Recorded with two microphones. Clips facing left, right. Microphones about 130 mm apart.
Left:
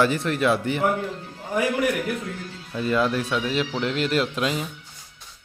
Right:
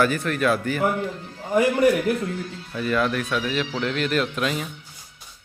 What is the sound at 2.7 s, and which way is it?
Speech, 25° left (ahead or behind).